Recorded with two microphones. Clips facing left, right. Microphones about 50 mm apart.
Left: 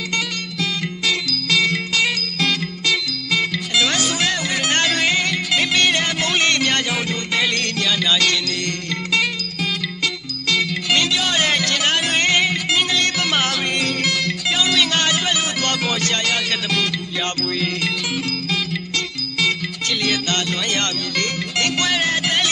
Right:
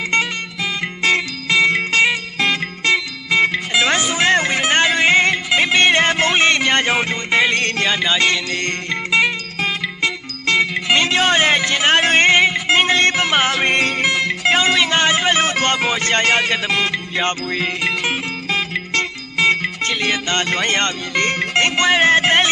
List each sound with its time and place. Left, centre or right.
1.0 s music: right
4.6 s music: right
5.1 s music: right
20.4 s speech: right